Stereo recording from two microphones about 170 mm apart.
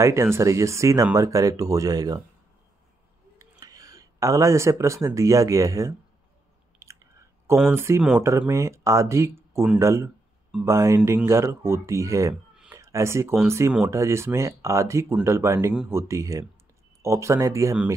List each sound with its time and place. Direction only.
0.0 s speech: 15° right (ahead or behind)
3.3 s speech: 20° right (ahead or behind)
6.8 s biting: 15° right (ahead or behind)
7.4 s speech: 10° right (ahead or behind)